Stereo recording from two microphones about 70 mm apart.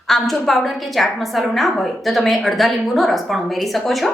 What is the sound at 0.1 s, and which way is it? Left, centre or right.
A woman's voice, centre.